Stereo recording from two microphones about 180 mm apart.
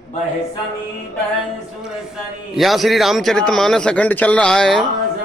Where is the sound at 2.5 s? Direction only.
Centre (ahead or behind).